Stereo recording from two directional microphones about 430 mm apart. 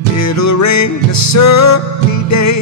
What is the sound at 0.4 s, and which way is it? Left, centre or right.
Music, left.